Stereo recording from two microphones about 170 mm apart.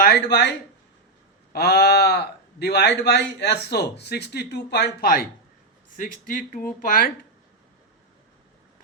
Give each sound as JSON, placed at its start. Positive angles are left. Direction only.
{"t": 0.0, "sound": "speech", "side_deg": 70}
{"t": 1.5, "sound": "speech", "side_deg": 70}